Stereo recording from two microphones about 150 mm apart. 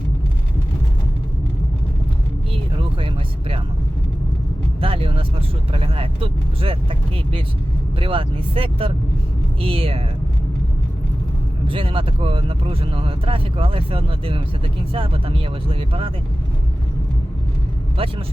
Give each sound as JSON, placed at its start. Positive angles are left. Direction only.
{"t": 4.8, "sound": "speech", "side_deg": -35}
{"t": 7.9, "sound": "speech", "side_deg": -35}
{"t": 11.7, "sound": "speech", "side_deg": -35}